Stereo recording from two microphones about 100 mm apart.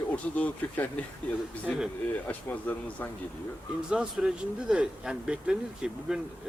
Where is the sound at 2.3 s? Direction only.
15° left (ahead or behind).